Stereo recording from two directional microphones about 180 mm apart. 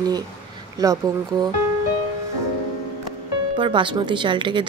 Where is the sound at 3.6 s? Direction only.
25° right (ahead or behind).